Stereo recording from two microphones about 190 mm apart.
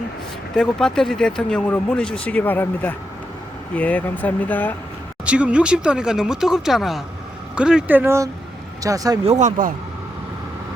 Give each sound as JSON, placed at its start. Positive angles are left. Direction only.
{"t": 0.5, "sound": "speech", "side_deg": 5}
{"t": 5.2, "sound": "speech", "side_deg": -5}
{"t": 9.4, "sound": "speech", "side_deg": -45}